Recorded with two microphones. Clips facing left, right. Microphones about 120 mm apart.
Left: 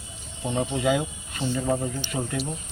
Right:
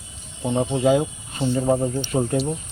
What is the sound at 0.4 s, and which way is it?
Speech, 25° right (ahead or behind).